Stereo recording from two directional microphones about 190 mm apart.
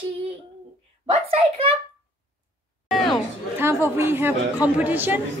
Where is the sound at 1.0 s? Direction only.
30° right (ahead or behind).